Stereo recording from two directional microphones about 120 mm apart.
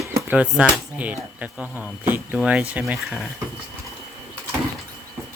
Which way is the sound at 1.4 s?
15° right (ahead or behind).